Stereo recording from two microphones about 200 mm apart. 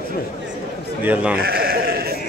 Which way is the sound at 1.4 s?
50° right (ahead or behind).